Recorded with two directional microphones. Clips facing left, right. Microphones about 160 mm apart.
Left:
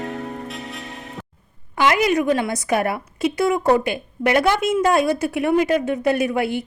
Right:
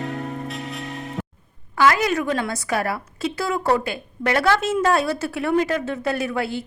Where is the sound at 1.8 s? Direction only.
15° left (ahead or behind).